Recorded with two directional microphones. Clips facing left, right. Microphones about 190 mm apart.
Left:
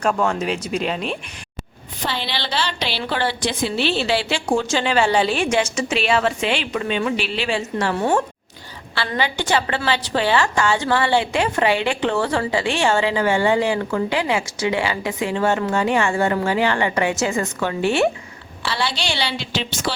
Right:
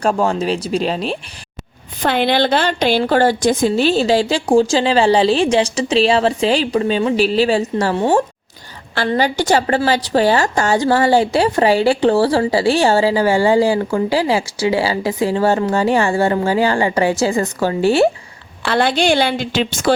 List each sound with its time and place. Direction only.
0.0 s a woman's voice: 30° right (ahead or behind)
2.0 s a woman's voice: 55° right (ahead or behind); by 8.2 s 30° right (ahead or behind)
9.0 s a woman's voice: 40° right (ahead or behind)
18.6 s a woman's voice: 50° right (ahead or behind)